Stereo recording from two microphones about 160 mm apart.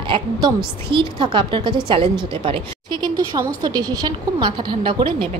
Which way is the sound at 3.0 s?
25° right (ahead or behind).